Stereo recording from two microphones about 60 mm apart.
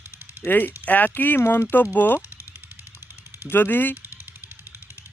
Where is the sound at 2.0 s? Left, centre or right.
Left.